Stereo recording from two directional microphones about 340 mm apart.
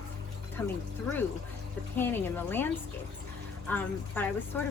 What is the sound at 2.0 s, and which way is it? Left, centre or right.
Speech, centre.